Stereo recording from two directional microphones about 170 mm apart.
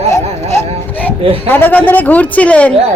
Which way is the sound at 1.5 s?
10° left (ahead or behind).